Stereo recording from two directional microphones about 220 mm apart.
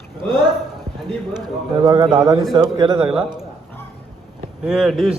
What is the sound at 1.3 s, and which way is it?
A man's voice, 20° right (ahead or behind).